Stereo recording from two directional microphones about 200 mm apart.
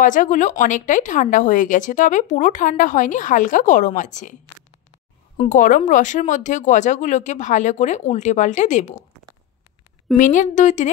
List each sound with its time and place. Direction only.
0.0 s speech: 40° left (ahead or behind)
5.5 s speech: 40° left (ahead or behind)
10.1 s speech: 40° left (ahead or behind)